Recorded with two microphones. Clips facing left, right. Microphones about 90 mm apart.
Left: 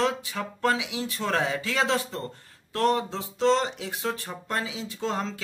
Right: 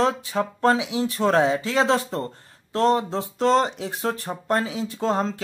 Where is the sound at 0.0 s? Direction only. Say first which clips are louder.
Right 5 dB; 35° right (ahead or behind).